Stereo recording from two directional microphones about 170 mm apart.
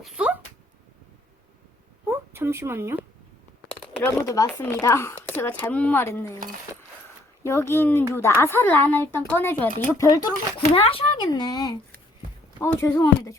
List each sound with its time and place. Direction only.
0.0 s speech: 5° right (ahead or behind)
2.0 s a woman's voice: 15° right (ahead or behind)
4.0 s speech: 15° left (ahead or behind)
7.4 s speech: 15° left (ahead or behind)
10.8 s speech: 30° left (ahead or behind)
12.5 s speech: 15° left (ahead or behind)